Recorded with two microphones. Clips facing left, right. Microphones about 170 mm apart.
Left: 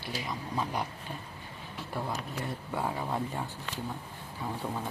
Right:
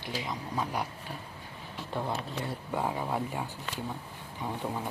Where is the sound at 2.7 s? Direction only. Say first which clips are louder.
Right 2 dB; 15° right (ahead or behind).